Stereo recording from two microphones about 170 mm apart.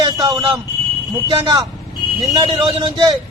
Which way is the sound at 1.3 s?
30° right (ahead or behind).